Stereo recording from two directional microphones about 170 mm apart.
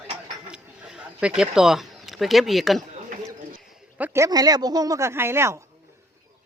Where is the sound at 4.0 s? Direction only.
15° right (ahead or behind).